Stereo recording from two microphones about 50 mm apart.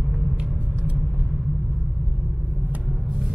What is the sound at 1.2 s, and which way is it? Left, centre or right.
Rumble, centre.